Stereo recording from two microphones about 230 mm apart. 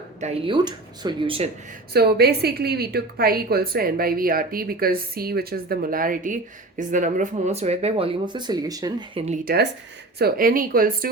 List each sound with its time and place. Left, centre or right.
0.2 s speech: right
1.9 s a woman's voice: right